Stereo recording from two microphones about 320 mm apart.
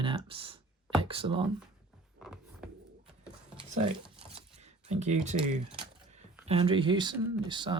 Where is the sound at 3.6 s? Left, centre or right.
Right.